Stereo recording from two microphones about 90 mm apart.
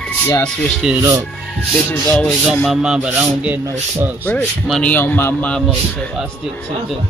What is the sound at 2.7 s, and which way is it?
Speech, 10° right (ahead or behind).